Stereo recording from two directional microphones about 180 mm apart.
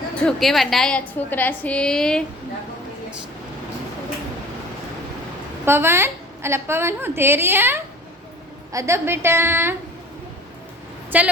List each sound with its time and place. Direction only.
0.2 s a woman's voice: 5° left (ahead or behind)
5.6 s a woman's voice: 15° right (ahead or behind)
11.1 s a woman's voice: 10° right (ahead or behind)